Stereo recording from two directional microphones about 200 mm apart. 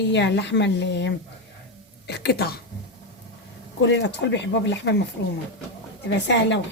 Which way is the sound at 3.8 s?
60° left (ahead or behind).